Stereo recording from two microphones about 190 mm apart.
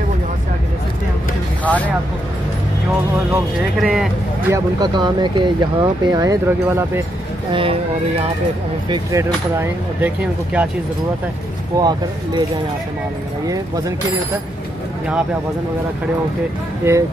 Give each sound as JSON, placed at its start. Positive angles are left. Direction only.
{"t": 1.7, "sound": "speech", "side_deg": 10}
{"t": 3.8, "sound": "speech", "side_deg": 0}
{"t": 4.5, "sound": "speech", "side_deg": -20}
{"t": 8.8, "sound": "speech", "side_deg": -20}
{"t": 11.7, "sound": "speech", "side_deg": -20}
{"t": 16.9, "sound": "speech", "side_deg": -10}